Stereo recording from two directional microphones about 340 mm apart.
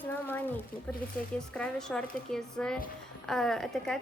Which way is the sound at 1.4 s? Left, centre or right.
Centre.